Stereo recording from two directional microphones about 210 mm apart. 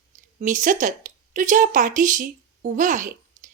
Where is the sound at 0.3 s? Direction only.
35° right (ahead or behind).